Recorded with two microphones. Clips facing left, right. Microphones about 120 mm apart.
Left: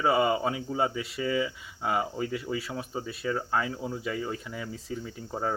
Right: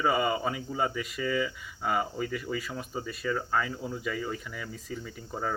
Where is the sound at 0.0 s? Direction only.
25° left (ahead or behind).